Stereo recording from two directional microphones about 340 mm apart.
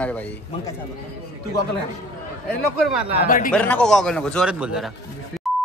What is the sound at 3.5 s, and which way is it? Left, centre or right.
Speech, centre.